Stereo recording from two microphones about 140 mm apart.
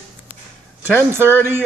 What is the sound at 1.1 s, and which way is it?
Speech, 15° right (ahead or behind).